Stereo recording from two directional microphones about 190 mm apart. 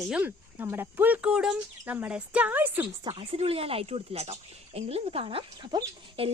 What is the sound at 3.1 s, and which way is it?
A woman's voice, 30° right (ahead or behind).